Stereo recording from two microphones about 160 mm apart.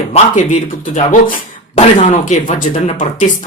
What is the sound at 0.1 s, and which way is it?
Speech, 45° left (ahead or behind).